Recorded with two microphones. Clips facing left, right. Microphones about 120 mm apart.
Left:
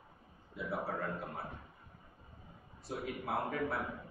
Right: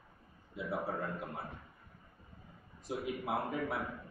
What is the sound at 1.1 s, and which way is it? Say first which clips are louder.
Speech: even; 15° left (ahead or behind).